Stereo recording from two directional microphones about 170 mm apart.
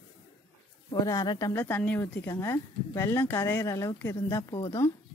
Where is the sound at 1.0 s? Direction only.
25° left (ahead or behind).